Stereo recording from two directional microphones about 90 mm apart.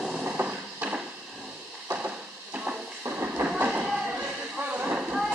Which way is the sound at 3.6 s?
15° right (ahead or behind).